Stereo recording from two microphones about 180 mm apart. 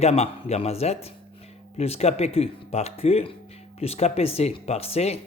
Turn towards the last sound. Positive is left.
turn(degrees=35)  # may be behind; listen again after turning